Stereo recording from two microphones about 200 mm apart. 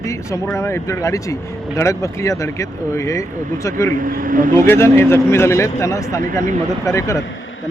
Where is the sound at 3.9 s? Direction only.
45° right (ahead or behind).